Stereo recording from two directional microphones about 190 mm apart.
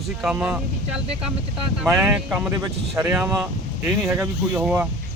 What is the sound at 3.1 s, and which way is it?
Speech, 5° right (ahead or behind).